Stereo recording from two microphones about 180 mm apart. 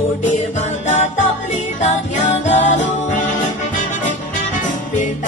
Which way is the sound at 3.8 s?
45° left (ahead or behind).